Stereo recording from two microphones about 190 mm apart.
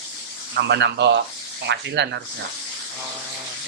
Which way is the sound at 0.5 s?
60° right (ahead or behind).